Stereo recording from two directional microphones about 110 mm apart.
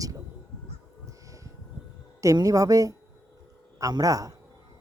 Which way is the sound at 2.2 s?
30° right (ahead or behind).